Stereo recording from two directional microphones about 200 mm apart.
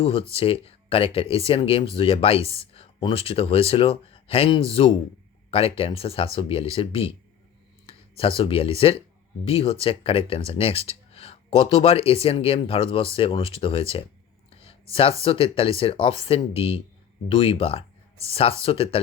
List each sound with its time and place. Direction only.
0.0 s speech: 25° left (ahead or behind)